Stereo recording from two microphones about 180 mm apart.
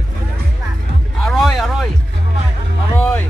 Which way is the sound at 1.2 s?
Centre (ahead or behind).